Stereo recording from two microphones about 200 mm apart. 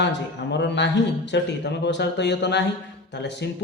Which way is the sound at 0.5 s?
60° left (ahead or behind).